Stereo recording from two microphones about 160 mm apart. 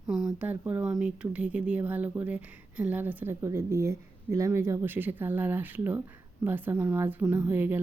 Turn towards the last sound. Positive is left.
turn(degrees=-10)  # may be behind; listen again after turning